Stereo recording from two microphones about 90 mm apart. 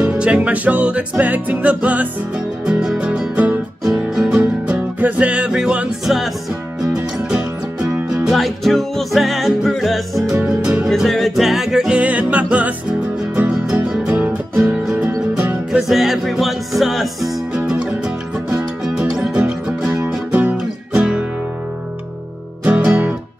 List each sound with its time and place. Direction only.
0.0 s music: 15° right (ahead or behind)
10.9 s music: 5° left (ahead or behind); by 21.3 s 15° right (ahead or behind)
22.7 s music: 20° right (ahead or behind)